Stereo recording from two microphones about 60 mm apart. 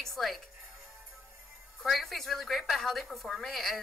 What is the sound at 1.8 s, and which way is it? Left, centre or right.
Speech, centre.